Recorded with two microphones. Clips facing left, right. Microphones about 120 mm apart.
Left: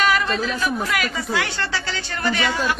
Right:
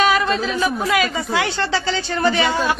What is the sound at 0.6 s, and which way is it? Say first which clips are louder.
Speech: right 4 dB; 25° right (ahead or behind).